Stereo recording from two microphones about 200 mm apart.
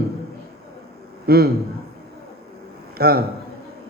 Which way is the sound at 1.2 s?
50° right (ahead or behind).